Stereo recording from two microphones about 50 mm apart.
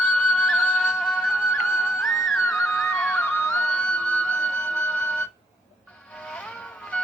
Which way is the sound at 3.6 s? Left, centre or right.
Left.